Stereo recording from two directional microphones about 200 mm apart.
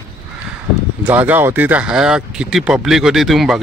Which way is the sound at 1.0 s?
10° right (ahead or behind).